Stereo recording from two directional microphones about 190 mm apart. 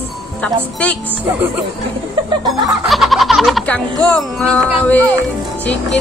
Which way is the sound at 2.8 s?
Centre (ahead or behind).